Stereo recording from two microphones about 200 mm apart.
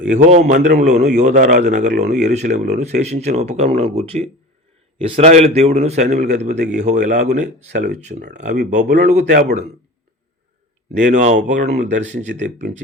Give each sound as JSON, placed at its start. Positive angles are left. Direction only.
{"t": 0.0, "sound": "a man's voice", "side_deg": -40}
{"t": 1.9, "sound": "speech", "side_deg": -55}
{"t": 2.1, "sound": "a man's voice", "side_deg": -35}
{"t": 11.0, "sound": "a man's voice", "side_deg": -40}